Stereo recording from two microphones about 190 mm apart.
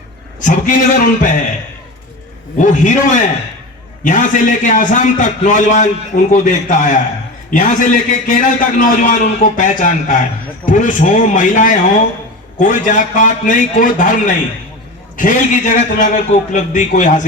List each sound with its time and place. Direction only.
0.4 s a man's voice: 45° left (ahead or behind)
2.6 s a man's voice: 40° left (ahead or behind)